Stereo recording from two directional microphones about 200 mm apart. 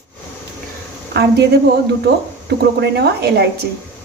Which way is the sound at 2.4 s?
55° right (ahead or behind).